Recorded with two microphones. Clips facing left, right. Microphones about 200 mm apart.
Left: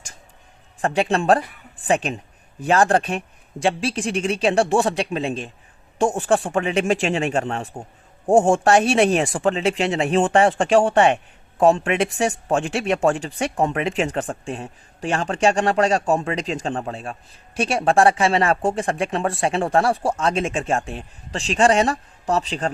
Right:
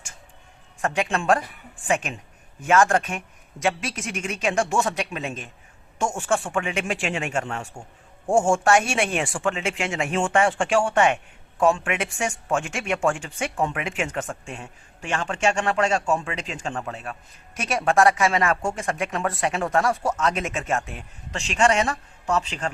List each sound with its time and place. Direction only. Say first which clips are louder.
0.8 s speech: left 5 dB; 35° left (ahead or behind)